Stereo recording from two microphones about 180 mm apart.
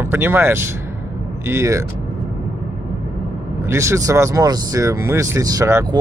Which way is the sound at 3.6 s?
15° right (ahead or behind).